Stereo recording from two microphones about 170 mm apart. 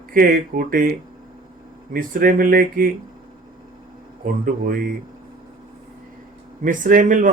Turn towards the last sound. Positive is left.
turn(degrees=-50)  # may be behind; listen again after turning